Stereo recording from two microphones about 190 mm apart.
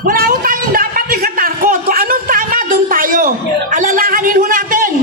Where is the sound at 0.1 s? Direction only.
50° right (ahead or behind).